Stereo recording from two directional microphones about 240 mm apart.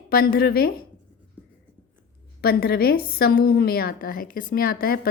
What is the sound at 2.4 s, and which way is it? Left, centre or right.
A woman's voice, left.